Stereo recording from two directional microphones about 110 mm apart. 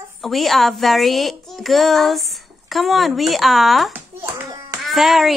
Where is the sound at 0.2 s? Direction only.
Centre (ahead or behind).